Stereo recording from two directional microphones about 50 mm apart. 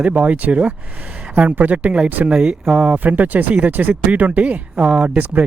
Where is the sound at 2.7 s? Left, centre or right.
Right.